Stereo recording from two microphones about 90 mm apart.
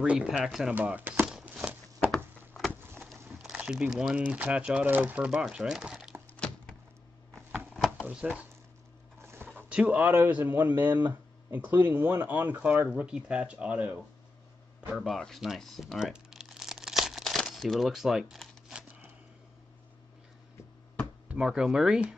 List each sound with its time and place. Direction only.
0.0 s speech: 10° right (ahead or behind)
0.8 s speech: 20° right (ahead or behind)
1.2 s a sound: 10° right (ahead or behind)
2.0 s a sound: 5° left (ahead or behind)
2.7 s a sound: 20° right (ahead or behind)
3.4 s speech: 10° right (ahead or behind)
6.3 s thunk: 15° left (ahead or behind)
7.7 s drawer open or close: 5° left (ahead or behind)
8.1 s speech: 15° right (ahead or behind)
9.6 s speech: 15° right (ahead or behind)
15.0 s crumpling: centre (ahead or behind)
21.3 s speech: 10° right (ahead or behind)